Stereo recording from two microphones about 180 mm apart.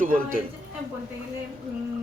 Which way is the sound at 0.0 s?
50° right (ahead or behind).